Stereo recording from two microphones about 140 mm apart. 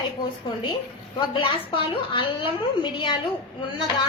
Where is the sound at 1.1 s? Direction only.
35° left (ahead or behind).